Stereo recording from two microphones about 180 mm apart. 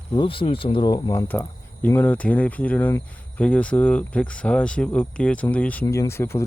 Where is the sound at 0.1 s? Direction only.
25° left (ahead or behind).